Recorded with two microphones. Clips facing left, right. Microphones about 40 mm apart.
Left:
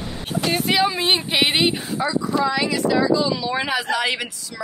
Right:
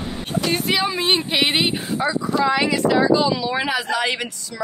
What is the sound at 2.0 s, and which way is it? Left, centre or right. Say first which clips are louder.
Speech: even; centre.